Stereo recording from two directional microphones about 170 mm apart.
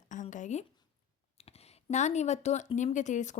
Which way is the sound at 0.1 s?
45° left (ahead or behind).